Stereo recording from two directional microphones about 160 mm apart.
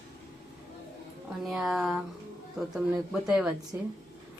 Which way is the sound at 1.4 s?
Centre (ahead or behind).